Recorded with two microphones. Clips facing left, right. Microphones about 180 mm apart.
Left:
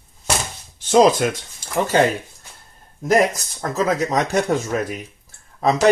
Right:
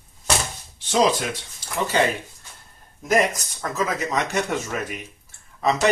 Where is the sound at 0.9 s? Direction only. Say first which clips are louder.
Left 6 dB; 45° left (ahead or behind).